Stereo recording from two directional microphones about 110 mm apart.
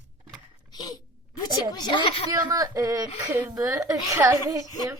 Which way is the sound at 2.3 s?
30° right (ahead or behind).